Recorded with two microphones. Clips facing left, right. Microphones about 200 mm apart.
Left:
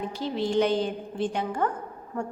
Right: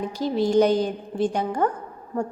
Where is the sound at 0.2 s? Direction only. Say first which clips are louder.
Right 6 dB; 40° right (ahead or behind).